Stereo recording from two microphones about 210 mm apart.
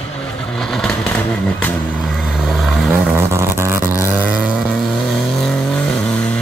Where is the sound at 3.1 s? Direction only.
10° right (ahead or behind).